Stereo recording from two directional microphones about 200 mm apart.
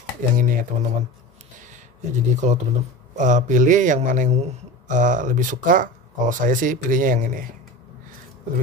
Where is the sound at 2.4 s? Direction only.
35° right (ahead or behind).